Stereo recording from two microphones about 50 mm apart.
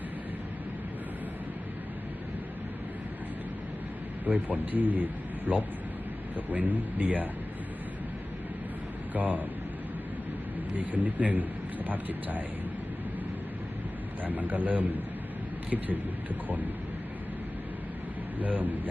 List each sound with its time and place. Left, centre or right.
4.3 s speech: right
9.1 s speech: right
10.8 s speech: right
14.3 s speech: right
18.3 s speech: right